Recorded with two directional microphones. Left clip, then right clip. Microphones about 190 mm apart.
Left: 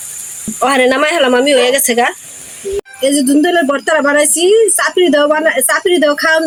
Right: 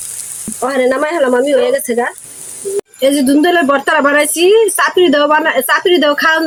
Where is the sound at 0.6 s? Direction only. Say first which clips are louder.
Left 3 dB; 15° right (ahead or behind).